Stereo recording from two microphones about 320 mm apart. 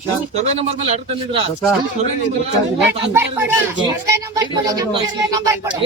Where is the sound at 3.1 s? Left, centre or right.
Centre.